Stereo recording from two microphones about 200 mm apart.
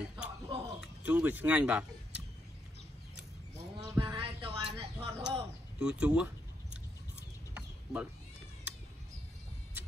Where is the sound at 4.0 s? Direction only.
25° right (ahead or behind).